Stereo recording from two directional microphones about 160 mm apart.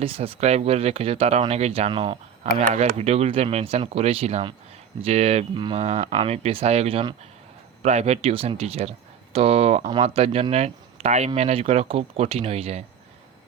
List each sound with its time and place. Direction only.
0.0 s speech: 35° right (ahead or behind)
7.8 s speech: 45° right (ahead or behind)